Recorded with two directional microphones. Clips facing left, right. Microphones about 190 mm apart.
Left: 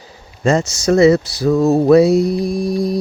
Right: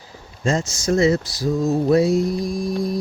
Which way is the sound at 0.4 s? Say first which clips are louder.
Left 6 dB; 70° left (ahead or behind).